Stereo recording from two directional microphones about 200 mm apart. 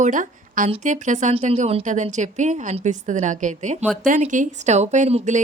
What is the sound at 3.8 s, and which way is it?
Speech, centre (ahead or behind).